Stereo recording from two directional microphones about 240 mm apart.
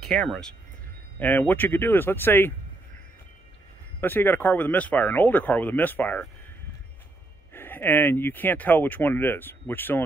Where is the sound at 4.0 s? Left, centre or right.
Centre.